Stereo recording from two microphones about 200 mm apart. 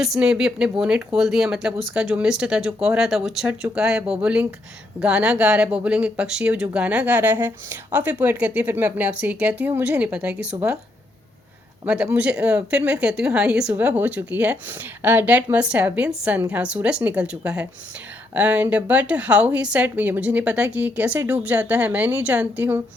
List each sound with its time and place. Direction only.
0.0 s speech: 5° right (ahead or behind)
10.5 s speech: 15° right (ahead or behind)
11.9 s speech: 5° right (ahead or behind)